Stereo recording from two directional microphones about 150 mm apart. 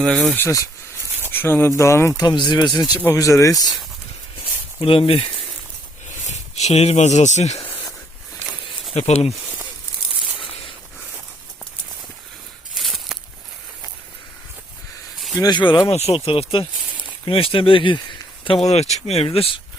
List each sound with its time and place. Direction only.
0.0 s speech: centre (ahead or behind)
0.3 s speech: 20° left (ahead or behind)
3.0 s speech: 20° left (ahead or behind)
4.8 s speech: 40° left (ahead or behind)
9.0 s speech: 45° left (ahead or behind)
12.7 s a sound: centre (ahead or behind)
15.4 s speech: 30° left (ahead or behind)